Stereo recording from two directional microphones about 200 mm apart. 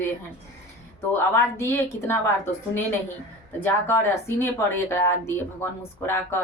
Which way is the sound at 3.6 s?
15° left (ahead or behind).